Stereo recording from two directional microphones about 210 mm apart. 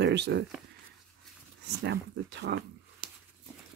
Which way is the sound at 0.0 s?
55° right (ahead or behind).